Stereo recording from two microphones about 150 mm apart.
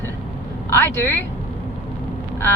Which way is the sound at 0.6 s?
15° left (ahead or behind).